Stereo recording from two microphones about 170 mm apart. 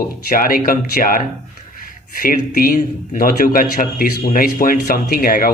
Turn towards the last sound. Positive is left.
turn(degrees=60)  # may be behind; listen again after turning